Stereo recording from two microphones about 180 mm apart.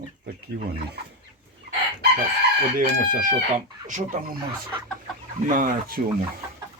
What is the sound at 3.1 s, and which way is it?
Speech, 45° right (ahead or behind).